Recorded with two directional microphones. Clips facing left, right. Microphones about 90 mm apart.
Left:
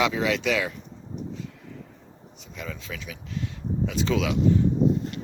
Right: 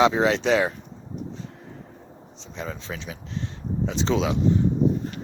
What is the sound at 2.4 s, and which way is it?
Speech, 30° right (ahead or behind).